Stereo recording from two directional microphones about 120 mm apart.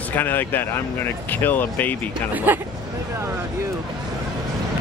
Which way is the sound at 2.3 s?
15° right (ahead or behind).